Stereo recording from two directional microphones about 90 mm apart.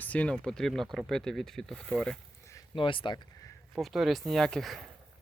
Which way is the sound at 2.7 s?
70° left (ahead or behind).